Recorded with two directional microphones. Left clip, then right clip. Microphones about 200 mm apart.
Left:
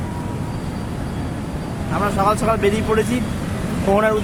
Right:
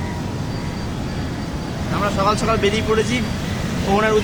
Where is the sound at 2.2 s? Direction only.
45° left (ahead or behind).